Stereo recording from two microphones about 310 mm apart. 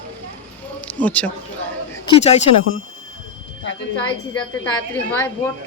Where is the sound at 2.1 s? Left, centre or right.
Centre.